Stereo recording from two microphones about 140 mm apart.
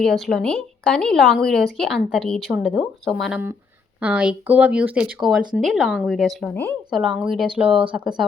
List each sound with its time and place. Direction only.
0.0 s speech: centre (ahead or behind)
6.5 s speech: 15° left (ahead or behind)
6.9 s speech: centre (ahead or behind)